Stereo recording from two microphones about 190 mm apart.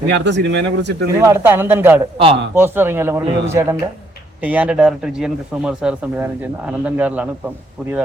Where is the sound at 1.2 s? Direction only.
10° right (ahead or behind).